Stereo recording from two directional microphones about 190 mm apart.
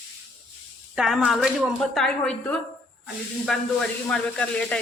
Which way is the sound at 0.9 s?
Centre (ahead or behind).